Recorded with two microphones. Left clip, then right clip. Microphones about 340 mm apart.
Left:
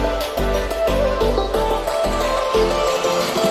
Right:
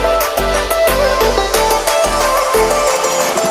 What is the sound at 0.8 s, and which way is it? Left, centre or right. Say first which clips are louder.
Music: right 6 dB; right.